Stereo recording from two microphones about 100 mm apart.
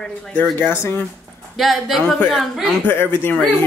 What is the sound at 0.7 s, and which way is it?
Speech, 25° left (ahead or behind).